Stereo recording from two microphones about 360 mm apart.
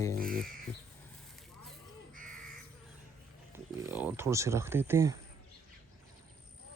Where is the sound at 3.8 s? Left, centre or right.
Centre.